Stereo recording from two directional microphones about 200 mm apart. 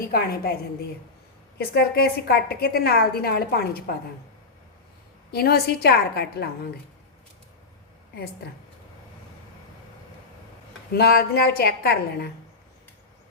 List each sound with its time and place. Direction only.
0.0 s a woman's voice: 50° left (ahead or behind)
1.5 s a woman's voice: 50° left (ahead or behind)
5.3 s a woman's voice: 50° left (ahead or behind)
10.9 s a woman's voice: 50° left (ahead or behind)